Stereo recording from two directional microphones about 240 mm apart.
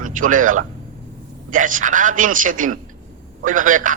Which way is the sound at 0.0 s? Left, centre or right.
Right.